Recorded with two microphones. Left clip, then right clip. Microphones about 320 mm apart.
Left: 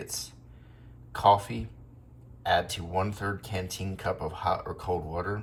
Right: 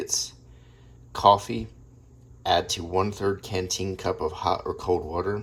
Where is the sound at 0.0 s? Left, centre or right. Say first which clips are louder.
Right 9 dB; centre.